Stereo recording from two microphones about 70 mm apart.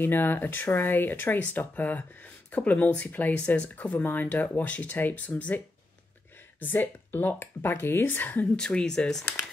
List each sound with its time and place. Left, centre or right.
0.0 s speech: left
6.6 s speech: left
8.5 s speech: centre